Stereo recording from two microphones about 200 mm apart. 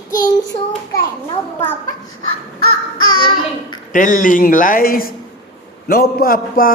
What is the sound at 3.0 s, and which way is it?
Child singing, 25° left (ahead or behind).